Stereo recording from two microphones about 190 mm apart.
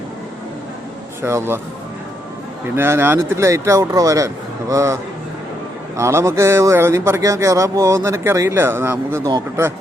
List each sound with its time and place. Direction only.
1.2 s speech: 15° right (ahead or behind)
2.7 s speech: 10° right (ahead or behind)
6.0 s speech: 15° right (ahead or behind)